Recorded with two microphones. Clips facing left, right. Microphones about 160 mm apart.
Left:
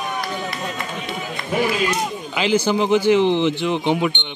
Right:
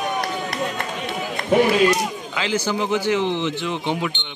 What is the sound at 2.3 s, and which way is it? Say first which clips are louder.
A man's voice: left 7 dB; 20° left (ahead or behind).